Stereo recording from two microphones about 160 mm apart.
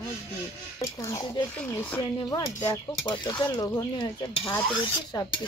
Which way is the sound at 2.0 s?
25° left (ahead or behind).